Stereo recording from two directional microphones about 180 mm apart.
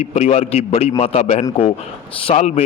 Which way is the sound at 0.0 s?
40° left (ahead or behind).